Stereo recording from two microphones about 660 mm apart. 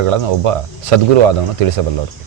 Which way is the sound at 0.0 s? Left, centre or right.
Right.